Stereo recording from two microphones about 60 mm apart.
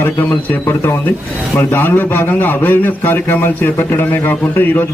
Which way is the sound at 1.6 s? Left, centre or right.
Left.